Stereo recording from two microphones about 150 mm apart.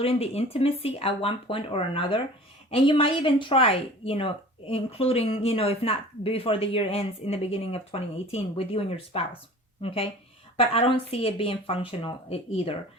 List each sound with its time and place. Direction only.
0.0 s speech: 40° left (ahead or behind)